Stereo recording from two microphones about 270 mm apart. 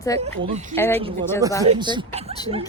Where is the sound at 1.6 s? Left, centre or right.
Centre.